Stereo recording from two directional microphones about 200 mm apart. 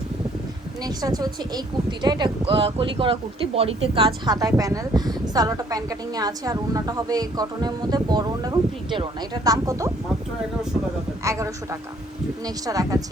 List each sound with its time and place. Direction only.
0.9 s speech: 20° right (ahead or behind)
11.2 s speech: 15° right (ahead or behind)